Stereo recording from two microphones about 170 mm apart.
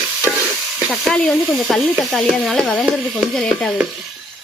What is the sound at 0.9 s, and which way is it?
A woman's voice, 5° left (ahead or behind).